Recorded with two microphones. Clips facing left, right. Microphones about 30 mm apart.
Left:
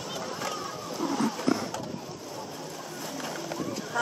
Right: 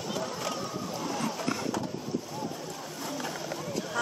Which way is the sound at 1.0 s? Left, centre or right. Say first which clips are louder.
Left 6 dB; centre.